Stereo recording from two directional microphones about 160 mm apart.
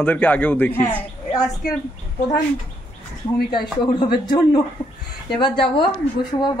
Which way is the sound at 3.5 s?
30° left (ahead or behind).